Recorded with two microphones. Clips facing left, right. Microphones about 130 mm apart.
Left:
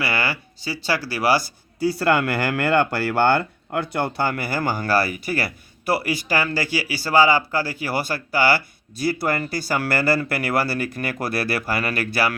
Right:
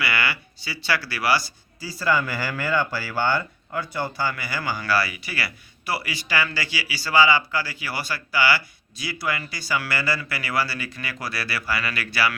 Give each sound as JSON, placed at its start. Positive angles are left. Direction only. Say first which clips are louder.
{"t": 0.0, "sound": "speech", "louder": "left 2 dB", "side_deg": 40}